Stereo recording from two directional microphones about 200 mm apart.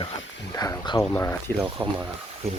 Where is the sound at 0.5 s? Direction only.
15° left (ahead or behind).